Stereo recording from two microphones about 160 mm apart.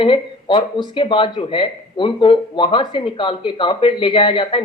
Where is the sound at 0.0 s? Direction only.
30° left (ahead or behind).